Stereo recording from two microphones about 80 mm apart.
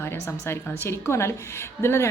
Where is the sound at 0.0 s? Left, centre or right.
Left.